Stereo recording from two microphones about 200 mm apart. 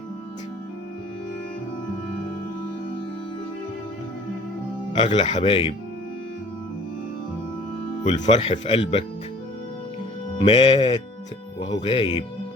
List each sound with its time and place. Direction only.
4.9 s speech: 25° left (ahead or behind)
8.2 s speech: 35° left (ahead or behind)
10.3 s speech: 25° left (ahead or behind)